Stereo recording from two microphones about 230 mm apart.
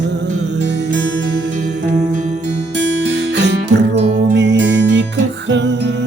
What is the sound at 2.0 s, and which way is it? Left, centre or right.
Music, right.